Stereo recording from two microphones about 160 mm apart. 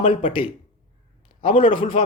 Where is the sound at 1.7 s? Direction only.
30° left (ahead or behind).